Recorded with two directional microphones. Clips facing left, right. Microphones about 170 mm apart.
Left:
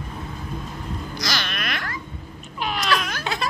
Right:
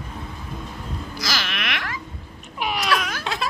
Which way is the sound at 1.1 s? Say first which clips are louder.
Even; 5° right (ahead or behind).